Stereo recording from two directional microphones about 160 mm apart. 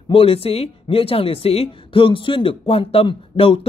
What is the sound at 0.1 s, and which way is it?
Speech, 35° left (ahead or behind).